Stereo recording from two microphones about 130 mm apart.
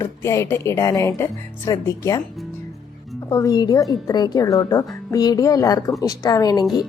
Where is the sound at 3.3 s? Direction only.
25° left (ahead or behind).